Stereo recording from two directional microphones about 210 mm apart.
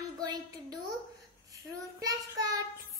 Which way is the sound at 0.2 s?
20° right (ahead or behind).